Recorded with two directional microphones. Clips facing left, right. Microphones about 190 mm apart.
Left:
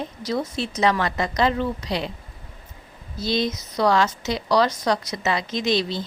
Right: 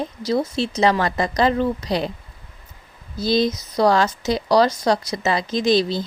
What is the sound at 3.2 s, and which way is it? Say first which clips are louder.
A woman's voice: right 5 dB; 35° right (ahead or behind).